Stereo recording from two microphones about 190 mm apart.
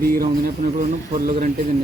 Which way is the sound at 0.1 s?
50° right (ahead or behind).